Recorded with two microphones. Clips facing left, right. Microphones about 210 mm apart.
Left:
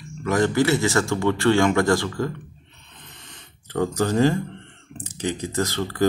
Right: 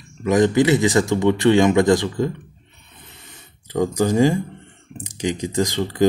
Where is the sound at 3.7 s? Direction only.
10° right (ahead or behind).